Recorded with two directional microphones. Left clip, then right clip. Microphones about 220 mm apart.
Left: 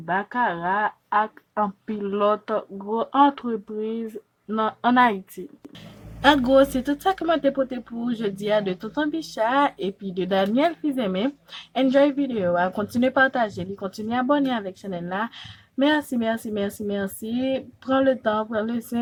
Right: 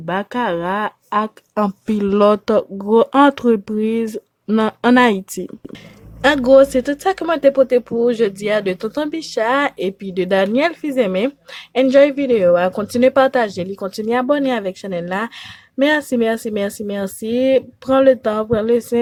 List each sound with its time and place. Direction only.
0.0 s speech: 40° right (ahead or behind)
6.2 s speech: 25° right (ahead or behind)